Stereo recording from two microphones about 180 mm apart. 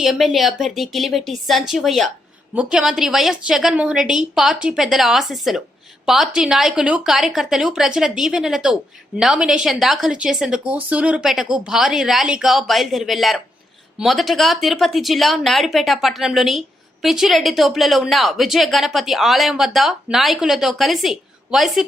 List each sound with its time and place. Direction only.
0.0 s speech: centre (ahead or behind)